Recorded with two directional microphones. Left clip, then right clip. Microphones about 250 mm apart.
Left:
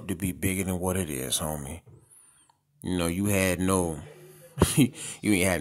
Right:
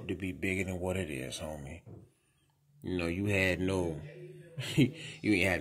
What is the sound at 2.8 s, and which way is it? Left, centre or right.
Speech, left.